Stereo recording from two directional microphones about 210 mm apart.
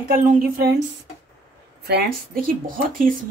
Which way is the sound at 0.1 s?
40° right (ahead or behind).